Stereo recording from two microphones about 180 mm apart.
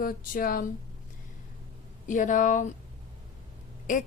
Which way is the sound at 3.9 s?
45° left (ahead or behind).